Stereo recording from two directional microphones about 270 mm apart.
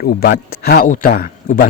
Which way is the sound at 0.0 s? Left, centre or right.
Left.